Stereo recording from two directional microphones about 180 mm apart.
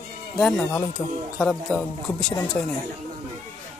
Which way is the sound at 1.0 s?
10° left (ahead or behind).